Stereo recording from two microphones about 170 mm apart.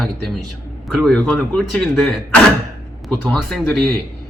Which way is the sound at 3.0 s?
5° left (ahead or behind).